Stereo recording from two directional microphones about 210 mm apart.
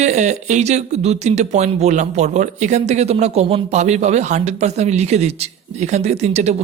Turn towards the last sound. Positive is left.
turn(degrees=-30)  # may be behind; listen again after turning